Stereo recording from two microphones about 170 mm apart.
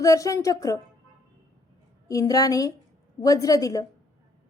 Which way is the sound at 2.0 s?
20° left (ahead or behind).